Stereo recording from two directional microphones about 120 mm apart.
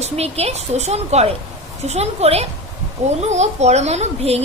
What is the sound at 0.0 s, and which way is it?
A woman's voice, 60° right (ahead or behind).